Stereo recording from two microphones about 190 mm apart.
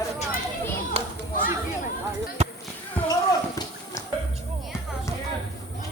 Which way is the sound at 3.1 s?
15° left (ahead or behind).